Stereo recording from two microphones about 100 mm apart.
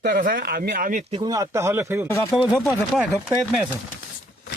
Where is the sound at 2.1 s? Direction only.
30° left (ahead or behind).